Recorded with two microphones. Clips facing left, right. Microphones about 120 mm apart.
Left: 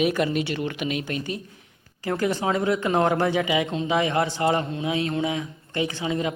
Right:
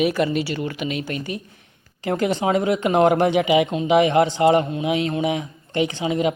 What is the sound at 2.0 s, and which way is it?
Speech, 20° right (ahead or behind).